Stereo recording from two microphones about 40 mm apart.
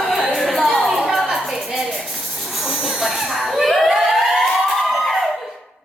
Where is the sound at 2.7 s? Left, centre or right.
Right.